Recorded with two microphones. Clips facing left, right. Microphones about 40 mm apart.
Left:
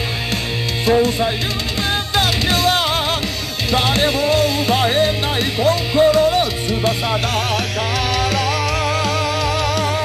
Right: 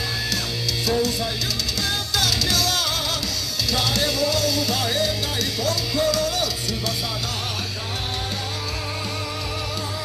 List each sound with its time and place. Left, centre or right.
0.8 s music: left
5.6 s speech: left